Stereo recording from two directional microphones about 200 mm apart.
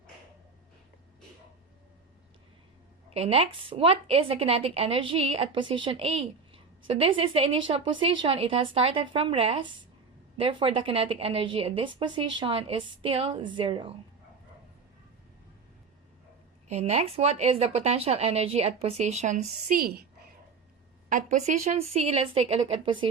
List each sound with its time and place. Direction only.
3.1 s a woman's voice: 30° right (ahead or behind)
16.6 s speech: 35° right (ahead or behind); by 20.2 s 50° right (ahead or behind)
21.1 s a woman's voice: 40° right (ahead or behind)